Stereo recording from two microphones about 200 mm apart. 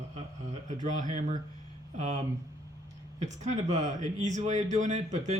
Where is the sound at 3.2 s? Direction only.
35° right (ahead or behind).